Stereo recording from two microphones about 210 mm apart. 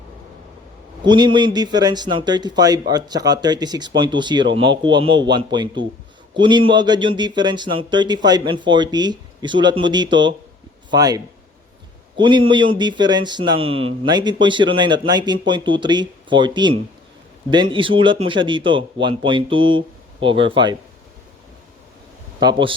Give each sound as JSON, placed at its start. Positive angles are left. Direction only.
{"t": 1.0, "sound": "speech", "side_deg": -20}
{"t": 22.4, "sound": "speech", "side_deg": -20}